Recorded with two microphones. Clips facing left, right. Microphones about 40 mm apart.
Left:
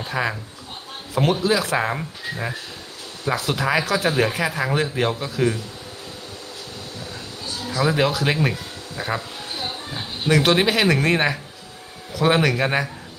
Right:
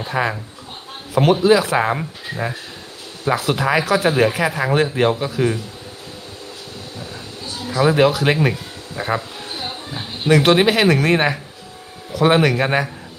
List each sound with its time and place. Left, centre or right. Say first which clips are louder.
0.0 s speech: right 3 dB; centre
5.4 s speech: right 1 dB; centre
7.7 s speech: right 5 dB; centre
9.0 s a sound: right 4 dB; centre
9.9 s speech: right 4 dB; centre